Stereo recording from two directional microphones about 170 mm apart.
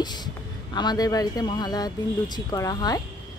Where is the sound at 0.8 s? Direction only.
25° left (ahead or behind).